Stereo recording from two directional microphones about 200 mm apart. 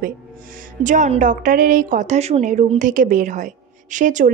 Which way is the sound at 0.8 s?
40° right (ahead or behind).